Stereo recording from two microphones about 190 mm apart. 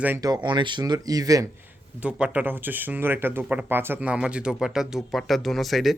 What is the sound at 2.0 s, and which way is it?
Speech, 5° right (ahead or behind).